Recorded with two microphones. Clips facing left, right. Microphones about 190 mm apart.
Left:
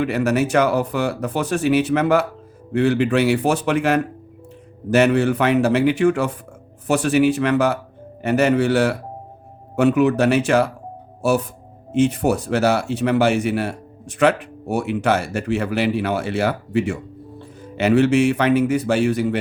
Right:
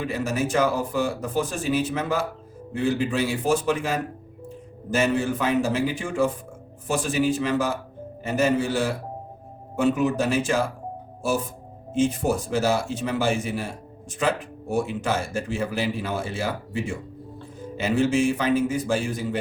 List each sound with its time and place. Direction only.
0.0 s speech: 70° left (ahead or behind)